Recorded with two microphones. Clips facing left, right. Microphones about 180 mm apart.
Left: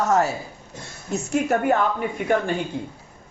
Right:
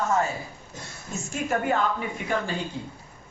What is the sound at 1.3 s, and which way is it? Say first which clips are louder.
Speech: left 6 dB; 65° left (ahead or behind).